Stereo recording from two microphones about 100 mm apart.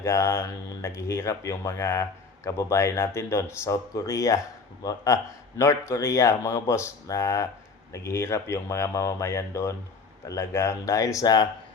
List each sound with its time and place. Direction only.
0.0 s speech: 25° left (ahead or behind)